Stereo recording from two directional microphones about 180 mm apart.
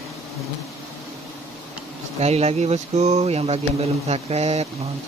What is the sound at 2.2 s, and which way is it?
Speech, 35° right (ahead or behind).